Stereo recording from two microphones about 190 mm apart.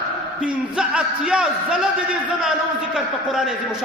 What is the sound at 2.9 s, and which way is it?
Speech, centre (ahead or behind).